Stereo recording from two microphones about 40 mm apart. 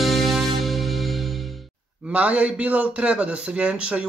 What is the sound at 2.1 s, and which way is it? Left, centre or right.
A man's voice, right.